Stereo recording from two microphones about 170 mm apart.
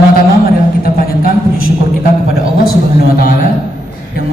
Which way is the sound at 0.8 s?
60° left (ahead or behind).